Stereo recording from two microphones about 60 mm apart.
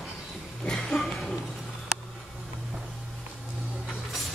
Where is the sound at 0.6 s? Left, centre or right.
Centre.